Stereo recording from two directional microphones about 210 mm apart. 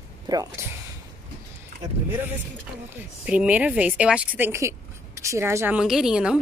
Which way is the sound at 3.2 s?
5° right (ahead or behind).